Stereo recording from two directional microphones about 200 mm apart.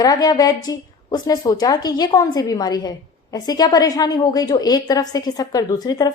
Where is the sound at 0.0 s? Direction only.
20° left (ahead or behind).